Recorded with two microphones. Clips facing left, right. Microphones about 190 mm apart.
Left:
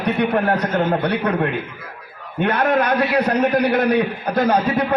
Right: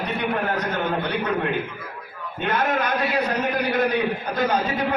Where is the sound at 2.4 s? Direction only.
65° left (ahead or behind).